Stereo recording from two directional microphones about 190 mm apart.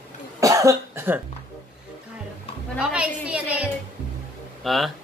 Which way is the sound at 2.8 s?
5° right (ahead or behind).